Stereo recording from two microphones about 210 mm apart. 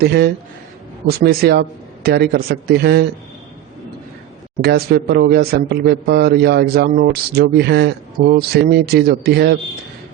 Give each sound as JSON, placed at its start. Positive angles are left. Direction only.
{"t": 0.0, "sound": "speech", "side_deg": -50}
{"t": 4.6, "sound": "speech", "side_deg": -50}